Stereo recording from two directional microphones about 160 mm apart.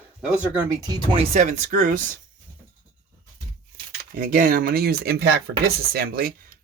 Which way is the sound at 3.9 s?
60° right (ahead or behind).